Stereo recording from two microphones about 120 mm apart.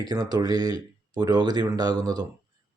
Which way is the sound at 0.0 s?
35° right (ahead or behind).